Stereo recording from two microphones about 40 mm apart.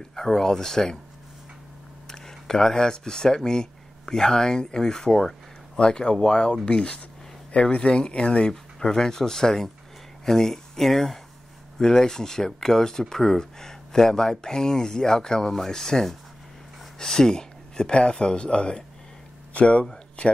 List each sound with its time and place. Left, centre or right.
0.1 s speech: centre
2.0 s speech: centre; by 20.3 s left